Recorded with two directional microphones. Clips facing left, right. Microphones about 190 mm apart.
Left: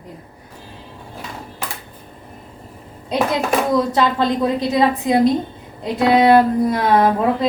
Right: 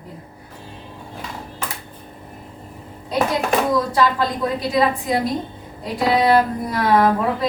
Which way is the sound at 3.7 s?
20° left (ahead or behind).